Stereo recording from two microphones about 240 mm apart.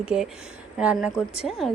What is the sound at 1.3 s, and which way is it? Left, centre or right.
Speech, left.